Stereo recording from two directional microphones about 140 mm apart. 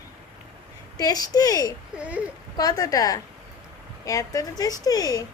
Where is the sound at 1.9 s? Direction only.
10° right (ahead or behind).